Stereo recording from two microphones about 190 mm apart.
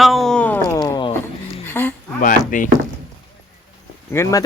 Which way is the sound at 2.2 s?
45° left (ahead or behind).